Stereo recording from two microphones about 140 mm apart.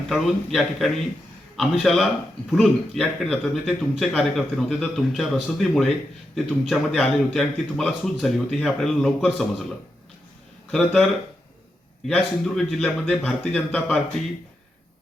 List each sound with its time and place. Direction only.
0.1 s speech: centre (ahead or behind)
10.7 s speech: 5° left (ahead or behind)
12.0 s speech: 5° left (ahead or behind)